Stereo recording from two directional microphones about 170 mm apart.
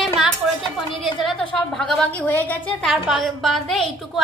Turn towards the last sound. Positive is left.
turn(degrees=0)  # may be behind; listen again after turning